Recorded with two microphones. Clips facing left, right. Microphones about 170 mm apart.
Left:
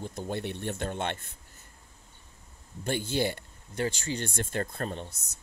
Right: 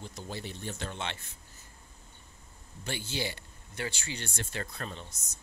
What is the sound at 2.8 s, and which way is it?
Speech, 50° left (ahead or behind).